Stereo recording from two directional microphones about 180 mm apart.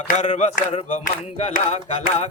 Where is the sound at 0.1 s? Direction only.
40° left (ahead or behind).